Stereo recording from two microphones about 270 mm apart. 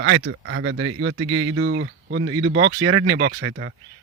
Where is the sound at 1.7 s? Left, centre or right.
Right.